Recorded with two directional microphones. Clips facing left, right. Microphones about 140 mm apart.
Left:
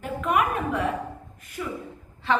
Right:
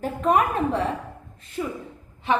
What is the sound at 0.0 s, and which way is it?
A woman's voice, 35° right (ahead or behind).